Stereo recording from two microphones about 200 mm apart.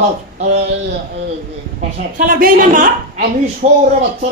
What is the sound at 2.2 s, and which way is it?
A woman's voice, 45° right (ahead or behind).